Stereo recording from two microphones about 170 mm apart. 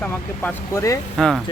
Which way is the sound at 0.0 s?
15° left (ahead or behind).